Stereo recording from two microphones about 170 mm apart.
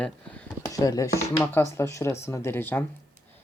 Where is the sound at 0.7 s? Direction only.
20° left (ahead or behind).